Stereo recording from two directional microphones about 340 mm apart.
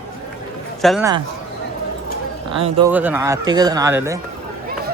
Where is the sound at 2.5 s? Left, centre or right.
Centre.